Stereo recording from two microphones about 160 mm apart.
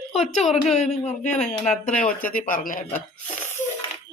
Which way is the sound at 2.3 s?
55° left (ahead or behind).